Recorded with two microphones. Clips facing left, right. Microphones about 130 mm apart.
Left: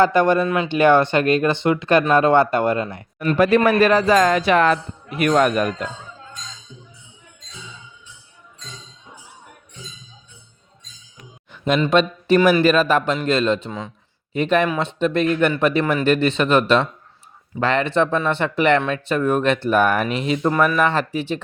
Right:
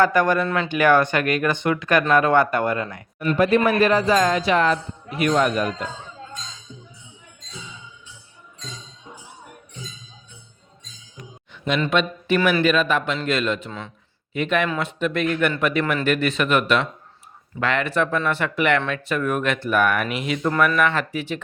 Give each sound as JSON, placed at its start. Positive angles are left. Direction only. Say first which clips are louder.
{"t": 0.0, "sound": "speech", "louder": "left 3 dB", "side_deg": 25}
{"t": 0.4, "sound": "a man's voice", "louder": "left 3 dB", "side_deg": 10}
{"t": 0.7, "sound": "speech", "louder": "left 3 dB", "side_deg": 25}
{"t": 3.3, "sound": "speech", "louder": "left 3 dB", "side_deg": 80}
{"t": 11.5, "sound": "a sound", "louder": "left 4 dB", "side_deg": 45}
{"t": 11.9, "sound": "speech", "louder": "left 6 dB", "side_deg": 35}
{"t": 13.7, "sound": "a man's voice", "louder": "left 4 dB", "side_deg": 15}
{"t": 14.3, "sound": "speech", "louder": "left 4 dB", "side_deg": 35}